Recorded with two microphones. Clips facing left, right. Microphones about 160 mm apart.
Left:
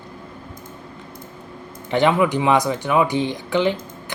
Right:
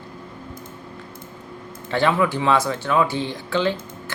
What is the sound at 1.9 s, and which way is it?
Speech, 20° left (ahead or behind).